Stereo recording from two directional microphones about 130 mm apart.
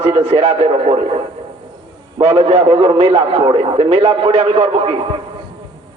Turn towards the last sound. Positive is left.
turn(degrees=-45)  # may be behind; listen again after turning